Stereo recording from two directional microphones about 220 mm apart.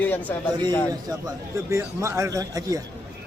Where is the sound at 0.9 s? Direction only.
15° right (ahead or behind).